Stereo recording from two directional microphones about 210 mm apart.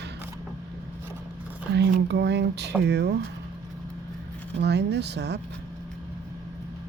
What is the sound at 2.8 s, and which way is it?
Speech, 55° right (ahead or behind).